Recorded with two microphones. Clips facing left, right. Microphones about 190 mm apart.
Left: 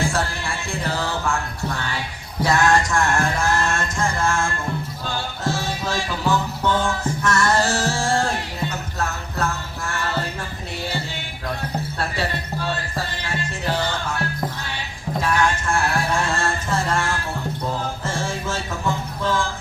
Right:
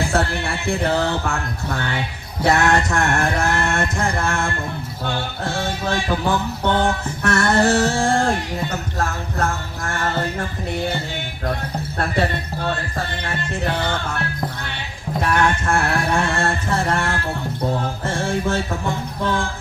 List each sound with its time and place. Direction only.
0.0 s music: 65° right (ahead or behind)
2.4 s music: 60° right (ahead or behind)
11.9 s music: 55° right (ahead or behind)
15.2 s music: 60° right (ahead or behind)